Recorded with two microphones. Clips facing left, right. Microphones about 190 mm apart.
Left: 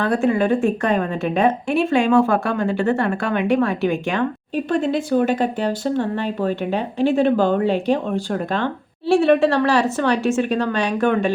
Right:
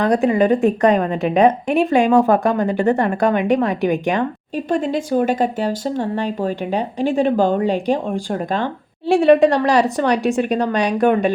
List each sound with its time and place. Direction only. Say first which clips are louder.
0.0 s a woman's voice: right 3 dB; 15° right (ahead or behind)
4.8 s speech: left 1 dB; 45° right (ahead or behind)
5.8 s a woman's voice: even; 10° right (ahead or behind)